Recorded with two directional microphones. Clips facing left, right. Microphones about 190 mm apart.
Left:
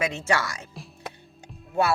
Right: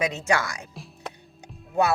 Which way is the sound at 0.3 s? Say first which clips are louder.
Right 1 dB; 15° right (ahead or behind).